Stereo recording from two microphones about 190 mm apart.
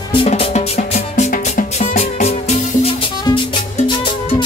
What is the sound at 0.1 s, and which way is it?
Music, 30° left (ahead or behind).